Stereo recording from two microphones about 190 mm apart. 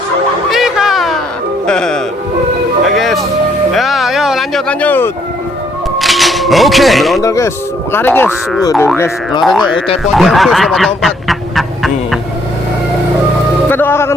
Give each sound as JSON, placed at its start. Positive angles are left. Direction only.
{"t": 0.5, "sound": "a sound", "side_deg": 0}
{"t": 1.6, "sound": "music", "side_deg": 5}
{"t": 6.0, "sound": "music", "side_deg": 0}
{"t": 7.2, "sound": "speech", "side_deg": 15}
{"t": 9.6, "sound": "speech", "side_deg": 25}
{"t": 10.0, "sound": "fowl", "side_deg": 0}
{"t": 13.7, "sound": "music", "side_deg": 10}